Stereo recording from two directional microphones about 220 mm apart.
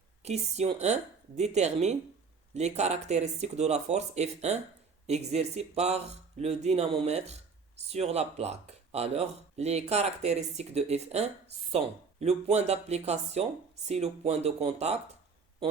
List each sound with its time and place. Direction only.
0.2 s speech: 30° right (ahead or behind)